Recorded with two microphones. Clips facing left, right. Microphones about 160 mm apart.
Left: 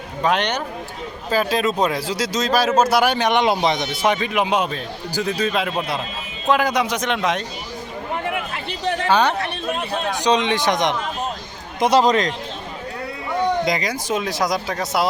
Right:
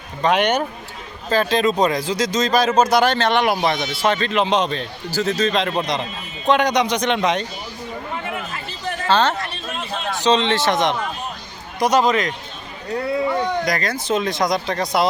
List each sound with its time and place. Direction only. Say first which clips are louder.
0.2 s speech: right 3 dB; centre (ahead or behind)
9.0 s speech: even; 10° left (ahead or behind)
9.4 s speech: left 4 dB; 60° left (ahead or behind)
10.1 s speech: right 2 dB; 15° left (ahead or behind)
11.8 s speech: left 1 dB; 30° left (ahead or behind)
13.7 s speech: right 1 dB; 15° left (ahead or behind)